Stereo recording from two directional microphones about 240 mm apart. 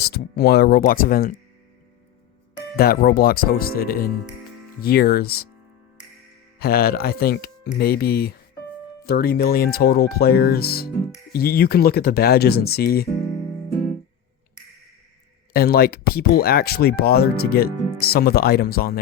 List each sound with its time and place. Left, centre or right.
0.0 s speech: left
2.7 s speech: left
6.6 s speech: left
15.5 s speech: left